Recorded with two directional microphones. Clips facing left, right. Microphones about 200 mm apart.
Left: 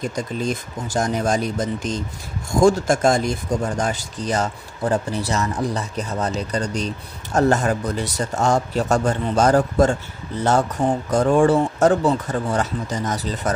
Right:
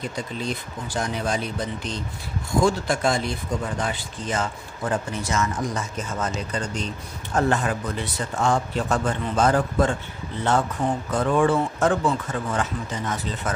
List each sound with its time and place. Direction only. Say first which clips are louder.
0.0 s speech: left 5 dB; 45° left (ahead or behind)